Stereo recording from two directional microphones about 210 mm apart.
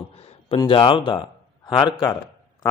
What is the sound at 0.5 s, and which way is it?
Speech, 25° left (ahead or behind).